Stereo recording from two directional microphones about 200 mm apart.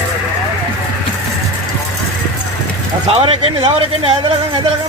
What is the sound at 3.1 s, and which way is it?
Speech, 30° right (ahead or behind).